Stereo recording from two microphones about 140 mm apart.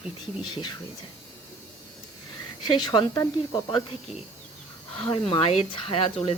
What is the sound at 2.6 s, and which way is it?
Speech, 30° left (ahead or behind).